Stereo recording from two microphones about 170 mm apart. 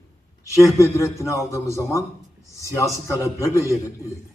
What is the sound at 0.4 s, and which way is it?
A man's voice, 20° left (ahead or behind).